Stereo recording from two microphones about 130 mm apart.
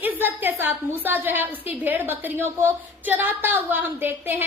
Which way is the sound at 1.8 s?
15° right (ahead or behind).